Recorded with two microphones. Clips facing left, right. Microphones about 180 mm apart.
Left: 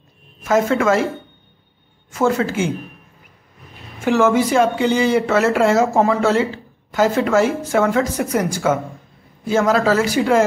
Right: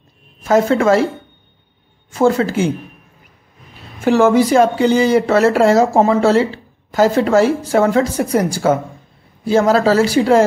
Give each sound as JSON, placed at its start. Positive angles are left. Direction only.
{"t": 0.4, "sound": "speech", "side_deg": -35}
{"t": 2.0, "sound": "speech", "side_deg": -30}
{"t": 4.0, "sound": "speech", "side_deg": -35}